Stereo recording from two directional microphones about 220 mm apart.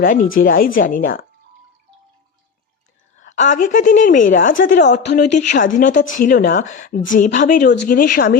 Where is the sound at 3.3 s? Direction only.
35° left (ahead or behind).